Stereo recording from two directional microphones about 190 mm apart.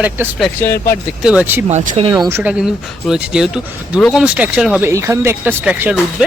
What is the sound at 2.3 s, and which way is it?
Speech, 15° right (ahead or behind).